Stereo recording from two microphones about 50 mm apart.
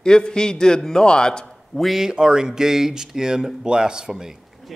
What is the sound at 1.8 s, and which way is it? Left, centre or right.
Speech, centre.